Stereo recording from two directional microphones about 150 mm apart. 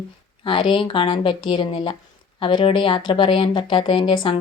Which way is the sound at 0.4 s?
35° left (ahead or behind).